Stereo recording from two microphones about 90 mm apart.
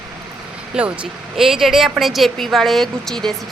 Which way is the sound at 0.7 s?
15° right (ahead or behind).